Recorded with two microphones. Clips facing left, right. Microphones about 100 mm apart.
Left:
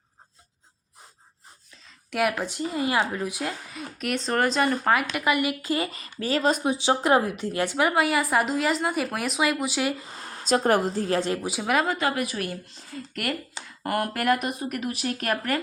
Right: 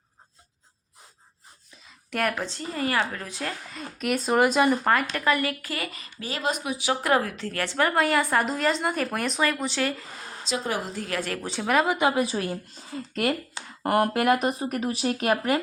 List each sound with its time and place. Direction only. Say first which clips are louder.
2.0 s speech: left 2 dB; 5° left (ahead or behind)
4.9 s speech: even; 10° left (ahead or behind)
10.4 s a woman's voice: left 8 dB; 50° left (ahead or behind)
10.9 s a woman's voice: left 5 dB; 30° left (ahead or behind)
11.4 s speech: right 1 dB; 5° left (ahead or behind)
11.9 s speech: right 3 dB; 20° right (ahead or behind)
13.8 s speech: right 4 dB; 35° right (ahead or behind)
14.1 s speech: right 2 dB; 25° right (ahead or behind)